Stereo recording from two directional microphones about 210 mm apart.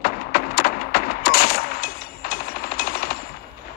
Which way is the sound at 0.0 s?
45° left (ahead or behind).